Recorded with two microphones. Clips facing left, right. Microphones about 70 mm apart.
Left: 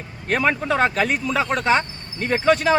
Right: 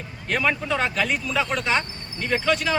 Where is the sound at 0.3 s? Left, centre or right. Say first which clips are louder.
Left 3 dB; left.